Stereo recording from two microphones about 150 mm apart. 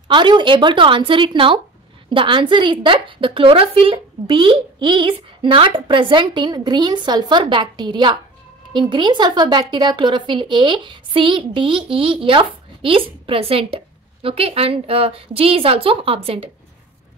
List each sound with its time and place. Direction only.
0.1 s a woman's voice: 30° right (ahead or behind)